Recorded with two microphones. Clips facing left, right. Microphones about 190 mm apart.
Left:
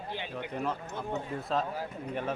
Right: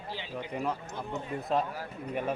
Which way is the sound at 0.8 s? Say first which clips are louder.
Left 2 dB; 65° left (ahead or behind).